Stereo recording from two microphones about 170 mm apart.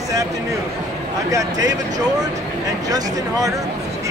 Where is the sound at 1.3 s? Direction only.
20° right (ahead or behind).